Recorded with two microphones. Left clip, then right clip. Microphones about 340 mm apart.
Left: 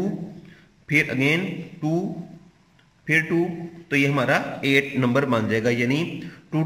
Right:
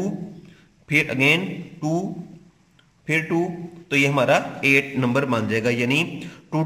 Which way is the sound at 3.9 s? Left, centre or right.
Centre.